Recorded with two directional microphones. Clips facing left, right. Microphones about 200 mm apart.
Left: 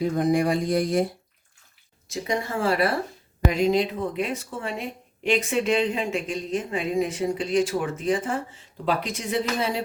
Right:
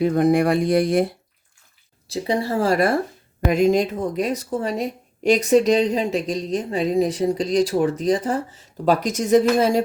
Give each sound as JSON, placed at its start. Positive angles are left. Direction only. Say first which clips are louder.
{"t": 0.0, "sound": "speech", "louder": "right 5 dB", "side_deg": -65}
{"t": 2.0, "sound": "a woman's voice", "louder": "right 5 dB", "side_deg": -30}